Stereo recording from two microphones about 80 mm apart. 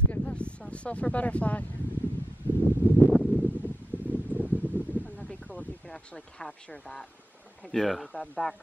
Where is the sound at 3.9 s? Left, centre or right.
Right.